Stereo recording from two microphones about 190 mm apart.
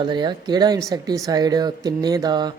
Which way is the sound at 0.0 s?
25° right (ahead or behind).